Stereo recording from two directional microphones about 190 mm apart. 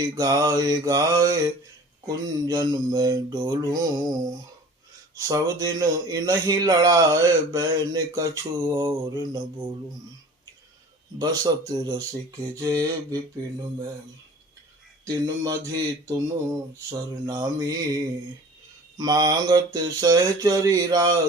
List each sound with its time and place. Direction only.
0.0 s speech: 20° right (ahead or behind)
5.1 s speech: 20° right (ahead or behind)
11.2 s speech: 20° right (ahead or behind)
12.5 s a sound: 15° right (ahead or behind)
15.0 s a sound: 15° right (ahead or behind)
17.2 s speech: 20° right (ahead or behind)